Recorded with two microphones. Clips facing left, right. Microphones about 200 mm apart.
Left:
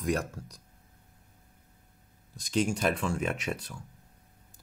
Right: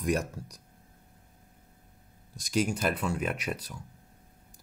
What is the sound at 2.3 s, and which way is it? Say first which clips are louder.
Speech: even; 10° right (ahead or behind).